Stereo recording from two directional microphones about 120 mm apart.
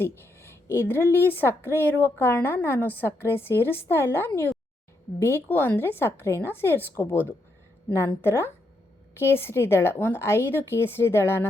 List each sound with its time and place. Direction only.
0.2 s a woman's voice: 20° left (ahead or behind)